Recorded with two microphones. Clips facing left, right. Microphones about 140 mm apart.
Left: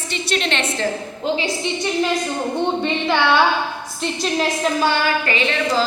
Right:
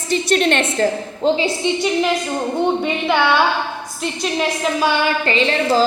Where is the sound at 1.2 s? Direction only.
30° right (ahead or behind).